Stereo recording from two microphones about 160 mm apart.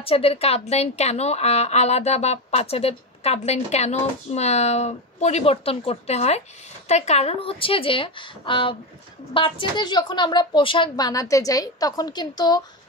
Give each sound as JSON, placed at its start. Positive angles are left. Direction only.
{"t": 0.0, "sound": "a woman's voice", "side_deg": 35}